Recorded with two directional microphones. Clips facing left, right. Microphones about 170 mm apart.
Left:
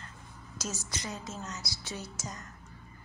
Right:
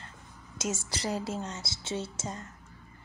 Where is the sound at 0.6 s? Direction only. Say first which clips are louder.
Right 5 dB; 25° right (ahead or behind).